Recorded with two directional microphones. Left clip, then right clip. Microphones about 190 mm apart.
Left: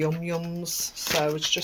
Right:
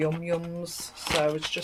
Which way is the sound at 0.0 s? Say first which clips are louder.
Even; 30° left (ahead or behind).